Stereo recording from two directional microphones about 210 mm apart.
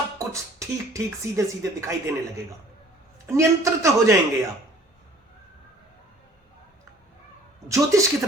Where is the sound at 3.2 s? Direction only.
15° right (ahead or behind).